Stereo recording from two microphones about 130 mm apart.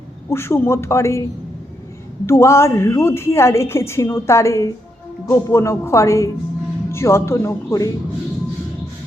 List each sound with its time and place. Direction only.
0.3 s a woman's voice: 20° left (ahead or behind)
2.2 s a woman's voice: 20° left (ahead or behind)